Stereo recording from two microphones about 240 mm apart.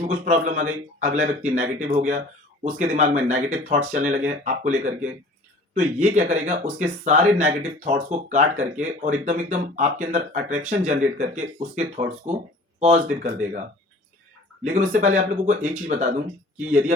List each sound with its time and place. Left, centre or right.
0.1 s speech: right
14.6 s speech: right